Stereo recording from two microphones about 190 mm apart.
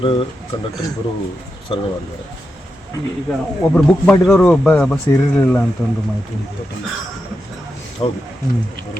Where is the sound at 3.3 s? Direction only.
5° left (ahead or behind).